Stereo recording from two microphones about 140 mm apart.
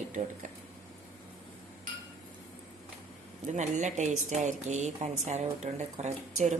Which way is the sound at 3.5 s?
55° right (ahead or behind).